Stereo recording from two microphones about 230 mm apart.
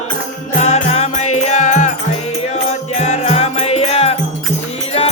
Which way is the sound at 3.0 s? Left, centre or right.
Left.